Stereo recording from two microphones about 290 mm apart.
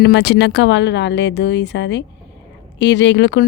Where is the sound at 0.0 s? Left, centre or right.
Left.